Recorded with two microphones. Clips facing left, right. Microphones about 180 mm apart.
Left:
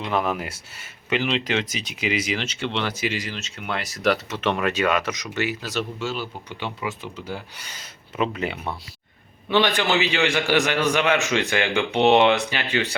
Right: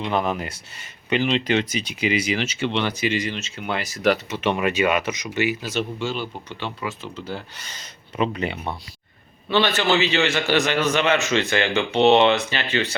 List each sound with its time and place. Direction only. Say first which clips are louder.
0.0 s speech: right 1 dB; centre (ahead or behind)
6.8 s a man's voice: even; 15° left (ahead or behind)
9.5 s a man's voice: right 1 dB; 15° left (ahead or behind)